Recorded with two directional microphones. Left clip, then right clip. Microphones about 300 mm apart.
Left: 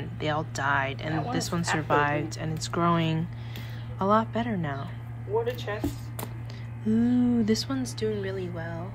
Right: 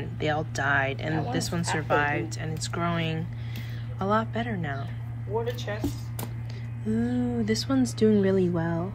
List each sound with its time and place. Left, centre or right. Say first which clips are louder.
0.0 s speech: right 1 dB; centre
5.7 s speech: even; left
6.9 s speech: left 3 dB; centre